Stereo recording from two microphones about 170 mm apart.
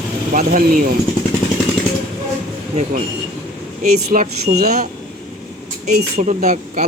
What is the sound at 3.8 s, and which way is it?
Speech, 55° right (ahead or behind).